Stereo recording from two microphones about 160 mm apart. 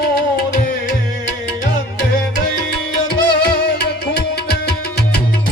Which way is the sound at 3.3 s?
90° left.